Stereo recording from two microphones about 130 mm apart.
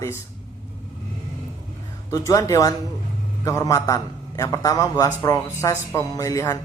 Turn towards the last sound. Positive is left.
turn(degrees=25)  # may be behind; listen again after turning